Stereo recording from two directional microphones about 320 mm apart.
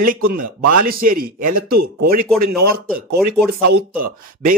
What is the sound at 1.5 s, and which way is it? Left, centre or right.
Speech, right.